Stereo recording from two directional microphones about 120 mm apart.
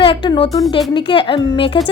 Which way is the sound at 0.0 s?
45° left (ahead or behind).